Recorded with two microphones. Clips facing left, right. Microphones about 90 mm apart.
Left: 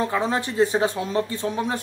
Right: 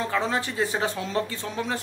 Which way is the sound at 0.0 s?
25° left (ahead or behind).